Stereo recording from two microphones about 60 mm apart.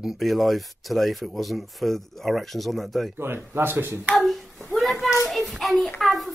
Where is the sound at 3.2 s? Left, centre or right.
Right.